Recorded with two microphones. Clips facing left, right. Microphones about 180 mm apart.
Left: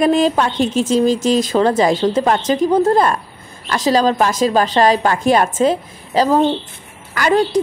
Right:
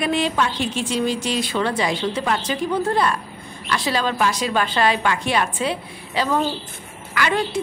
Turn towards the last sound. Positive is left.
turn(degrees=40)  # may be behind; listen again after turning